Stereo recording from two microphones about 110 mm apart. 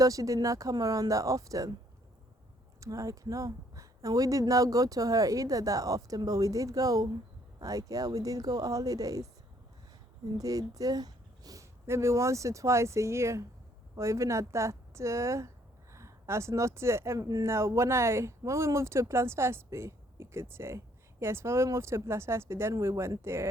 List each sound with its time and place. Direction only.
0.0 s speech: 30° right (ahead or behind)
2.8 s speech: 30° right (ahead or behind)
10.3 s speech: 35° right (ahead or behind)